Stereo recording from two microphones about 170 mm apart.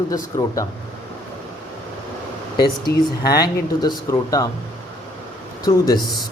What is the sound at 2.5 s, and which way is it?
Speech, 65° left (ahead or behind).